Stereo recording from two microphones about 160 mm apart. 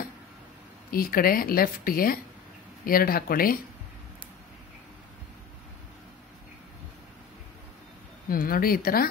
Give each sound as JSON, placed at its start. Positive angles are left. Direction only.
{"t": 0.9, "sound": "a woman's voice", "side_deg": 65}
{"t": 8.3, "sound": "a woman's voice", "side_deg": 65}